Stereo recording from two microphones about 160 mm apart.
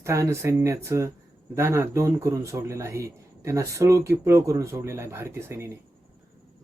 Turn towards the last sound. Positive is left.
turn(degrees=-15)  # may be behind; listen again after turning